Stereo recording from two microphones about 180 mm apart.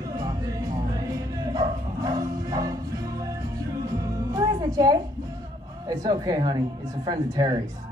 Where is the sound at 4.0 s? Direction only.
20° right (ahead or behind).